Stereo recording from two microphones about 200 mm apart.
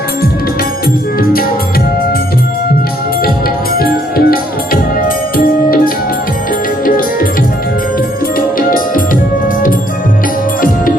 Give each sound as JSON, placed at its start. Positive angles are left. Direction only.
{"t": 1.2, "sound": "music", "side_deg": 45}
{"t": 3.8, "sound": "music", "side_deg": 45}
{"t": 8.4, "sound": "music", "side_deg": 45}